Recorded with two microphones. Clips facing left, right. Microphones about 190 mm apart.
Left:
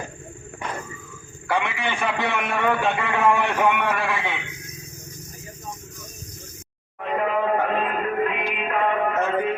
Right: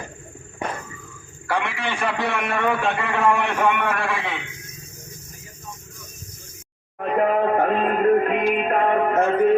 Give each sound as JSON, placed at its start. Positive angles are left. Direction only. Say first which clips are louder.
{"t": 1.5, "sound": "a man's voice", "louder": "even", "side_deg": 0}
{"t": 7.0, "sound": "music", "louder": "right 4 dB", "side_deg": -45}